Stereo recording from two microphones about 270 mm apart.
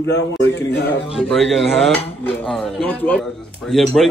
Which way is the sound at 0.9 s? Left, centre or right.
Centre.